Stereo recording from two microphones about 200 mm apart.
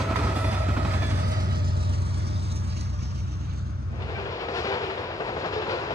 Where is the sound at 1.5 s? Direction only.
50° right (ahead or behind).